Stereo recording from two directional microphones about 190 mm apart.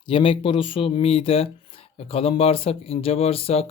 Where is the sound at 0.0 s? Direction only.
25° left (ahead or behind).